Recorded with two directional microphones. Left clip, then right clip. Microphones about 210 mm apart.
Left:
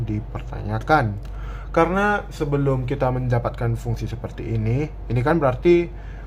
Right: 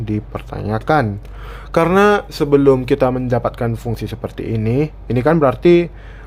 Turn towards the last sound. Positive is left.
turn(degrees=-40)  # may be behind; listen again after turning